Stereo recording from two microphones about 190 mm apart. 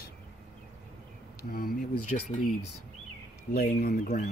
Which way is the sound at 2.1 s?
50° left (ahead or behind).